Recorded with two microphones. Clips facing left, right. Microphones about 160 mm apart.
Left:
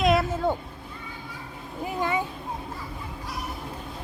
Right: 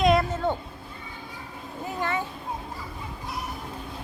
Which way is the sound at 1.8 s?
15° left (ahead or behind).